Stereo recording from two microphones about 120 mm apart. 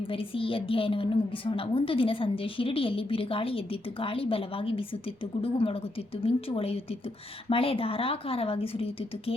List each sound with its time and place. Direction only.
0.1 s a woman's voice: 50° left (ahead or behind)